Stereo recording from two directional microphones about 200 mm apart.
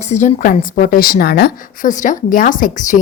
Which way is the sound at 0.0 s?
35° left (ahead or behind).